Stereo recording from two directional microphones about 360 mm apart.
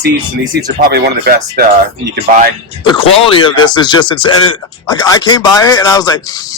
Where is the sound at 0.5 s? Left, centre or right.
Right.